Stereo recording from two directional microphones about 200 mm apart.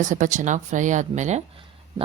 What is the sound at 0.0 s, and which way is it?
A woman's voice, 40° right (ahead or behind).